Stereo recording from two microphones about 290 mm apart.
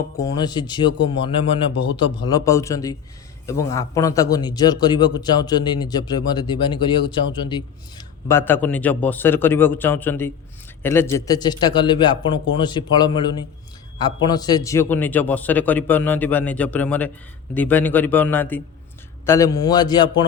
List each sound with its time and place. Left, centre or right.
0.2 s a man's voice: centre